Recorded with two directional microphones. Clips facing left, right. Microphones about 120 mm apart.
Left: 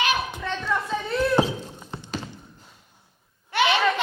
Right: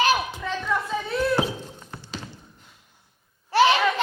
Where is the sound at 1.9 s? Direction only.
25° left (ahead or behind).